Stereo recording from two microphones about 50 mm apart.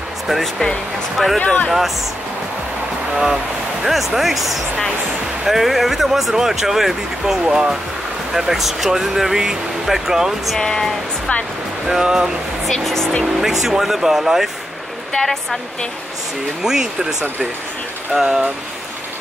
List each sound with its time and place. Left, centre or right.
0.3 s speech: centre
1.4 s speech: left
3.8 s speech: centre
10.6 s speech: centre
11.9 s speech: centre
12.6 s speech: centre
13.4 s speech: centre
15.1 s speech: centre
16.6 s speech: centre
18.1 s speech: centre